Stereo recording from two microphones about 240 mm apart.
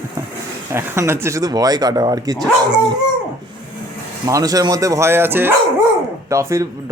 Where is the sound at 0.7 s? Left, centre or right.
Centre.